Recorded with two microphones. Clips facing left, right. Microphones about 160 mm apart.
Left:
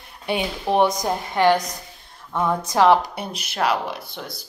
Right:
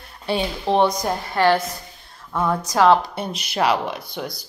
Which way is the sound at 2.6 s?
15° left (ahead or behind).